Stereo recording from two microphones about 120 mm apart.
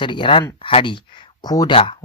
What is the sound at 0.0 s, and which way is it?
Speech, 40° left (ahead or behind).